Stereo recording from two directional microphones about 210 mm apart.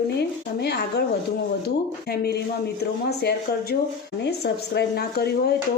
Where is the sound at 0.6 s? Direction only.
50° left (ahead or behind).